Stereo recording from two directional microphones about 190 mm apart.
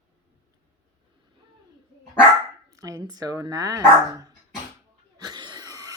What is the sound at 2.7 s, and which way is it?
Speech, 15° right (ahead or behind).